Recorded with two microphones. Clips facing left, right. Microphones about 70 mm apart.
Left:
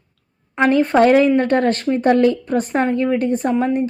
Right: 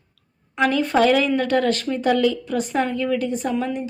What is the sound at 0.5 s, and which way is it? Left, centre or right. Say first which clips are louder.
A woman's voice: left 5 dB; left.